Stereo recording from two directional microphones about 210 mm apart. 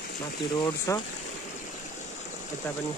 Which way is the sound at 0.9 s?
15° left (ahead or behind).